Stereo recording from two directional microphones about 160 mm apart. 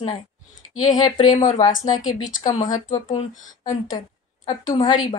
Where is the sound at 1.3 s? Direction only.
50° left (ahead or behind).